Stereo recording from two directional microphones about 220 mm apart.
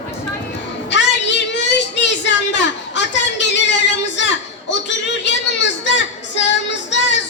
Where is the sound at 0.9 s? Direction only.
55° left (ahead or behind).